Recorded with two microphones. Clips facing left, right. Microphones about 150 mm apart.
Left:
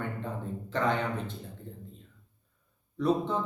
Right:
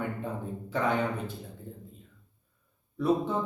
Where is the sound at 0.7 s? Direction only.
10° right (ahead or behind).